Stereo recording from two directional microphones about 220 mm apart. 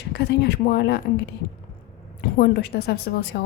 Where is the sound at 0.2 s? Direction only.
50° left (ahead or behind).